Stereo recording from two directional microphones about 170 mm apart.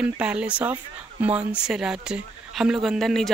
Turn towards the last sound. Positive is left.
turn(degrees=0)  # may be behind; listen again after turning